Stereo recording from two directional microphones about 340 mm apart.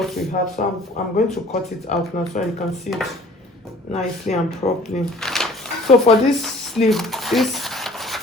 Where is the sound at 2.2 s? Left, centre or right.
Left.